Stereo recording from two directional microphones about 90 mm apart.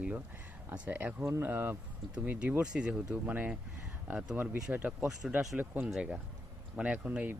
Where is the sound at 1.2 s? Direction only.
30° right (ahead or behind).